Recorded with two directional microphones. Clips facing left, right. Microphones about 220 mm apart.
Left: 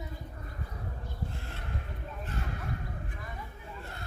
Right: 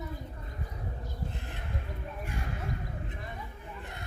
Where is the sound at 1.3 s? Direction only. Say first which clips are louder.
Right 1 dB; 20° right (ahead or behind).